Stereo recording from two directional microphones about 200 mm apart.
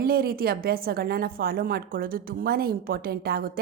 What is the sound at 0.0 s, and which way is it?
A woman's voice, 50° right (ahead or behind).